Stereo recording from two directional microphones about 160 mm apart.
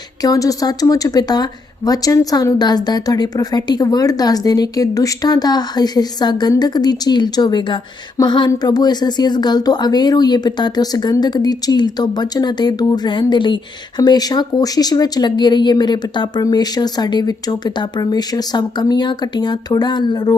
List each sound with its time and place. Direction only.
0.2 s speech: 20° left (ahead or behind)